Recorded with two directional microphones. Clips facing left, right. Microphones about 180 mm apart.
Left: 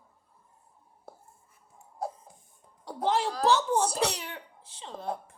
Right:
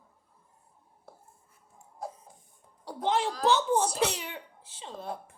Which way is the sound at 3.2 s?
35° left (ahead or behind).